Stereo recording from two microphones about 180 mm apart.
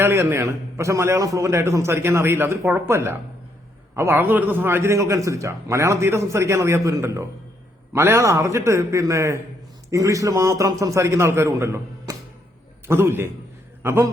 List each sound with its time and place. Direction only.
0.0 s a man's voice: 15° right (ahead or behind)